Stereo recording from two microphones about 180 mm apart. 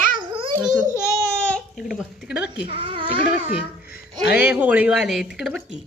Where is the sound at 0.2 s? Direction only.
30° right (ahead or behind).